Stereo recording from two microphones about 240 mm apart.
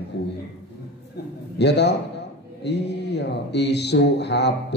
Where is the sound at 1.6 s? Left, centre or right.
Left.